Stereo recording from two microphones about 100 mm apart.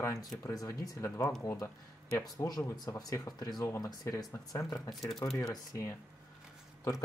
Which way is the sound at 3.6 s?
25° left (ahead or behind).